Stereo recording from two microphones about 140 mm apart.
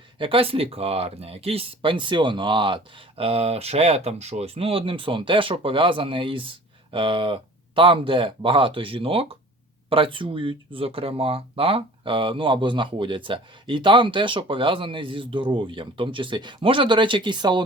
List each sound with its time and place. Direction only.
0.2 s speech: 40° right (ahead or behind)